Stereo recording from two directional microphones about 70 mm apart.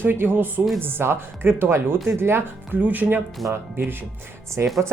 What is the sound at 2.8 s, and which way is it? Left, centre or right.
Speech, right.